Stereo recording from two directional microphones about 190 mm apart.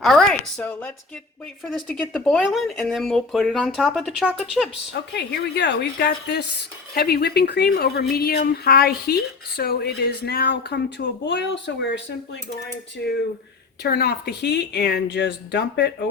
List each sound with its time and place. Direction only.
0.0 s speech: 5° left (ahead or behind)
2.1 s speech: centre (ahead or behind)
4.9 s speech: 65° left (ahead or behind)
13.8 s speech: 55° left (ahead or behind)